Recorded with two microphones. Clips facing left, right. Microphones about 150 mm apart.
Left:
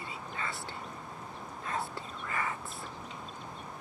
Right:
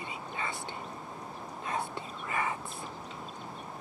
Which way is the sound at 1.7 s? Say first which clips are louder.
Right 1 dB; 20° right (ahead or behind).